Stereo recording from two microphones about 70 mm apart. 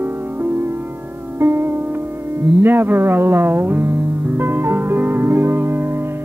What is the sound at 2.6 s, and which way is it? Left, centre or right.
Music, right.